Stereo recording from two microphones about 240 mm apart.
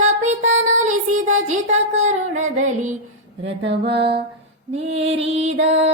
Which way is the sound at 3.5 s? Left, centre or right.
Right.